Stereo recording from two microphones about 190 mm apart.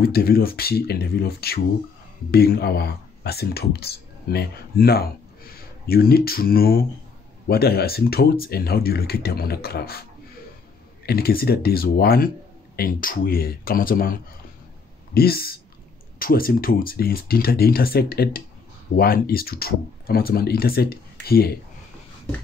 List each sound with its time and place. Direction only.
0.0 s speech: 55° left (ahead or behind)
11.1 s speech: 55° left (ahead or behind)